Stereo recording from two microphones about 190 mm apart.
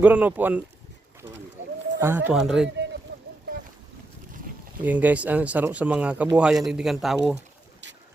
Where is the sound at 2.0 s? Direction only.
10° right (ahead or behind).